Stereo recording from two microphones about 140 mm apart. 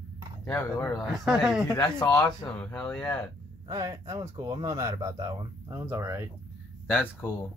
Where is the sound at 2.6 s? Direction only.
10° left (ahead or behind).